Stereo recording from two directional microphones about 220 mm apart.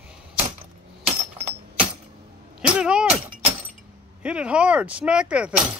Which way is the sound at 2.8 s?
5° right (ahead or behind).